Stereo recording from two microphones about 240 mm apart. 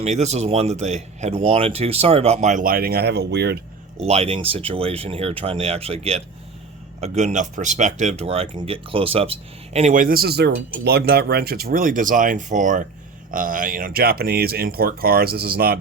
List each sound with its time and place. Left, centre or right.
0.0 s speech: right
4.0 s speech: right